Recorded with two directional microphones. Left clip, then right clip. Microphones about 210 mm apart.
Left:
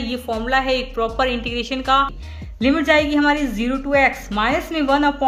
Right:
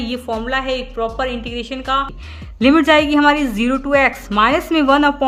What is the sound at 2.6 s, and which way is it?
Speech, 30° right (ahead or behind).